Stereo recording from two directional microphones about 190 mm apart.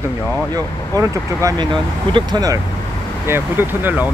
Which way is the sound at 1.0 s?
20° right (ahead or behind).